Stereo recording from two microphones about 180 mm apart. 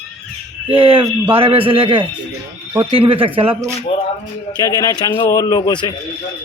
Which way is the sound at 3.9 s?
30° left (ahead or behind).